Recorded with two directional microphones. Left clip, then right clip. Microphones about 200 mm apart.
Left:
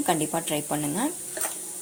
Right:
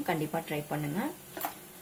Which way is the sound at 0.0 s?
30° left (ahead or behind).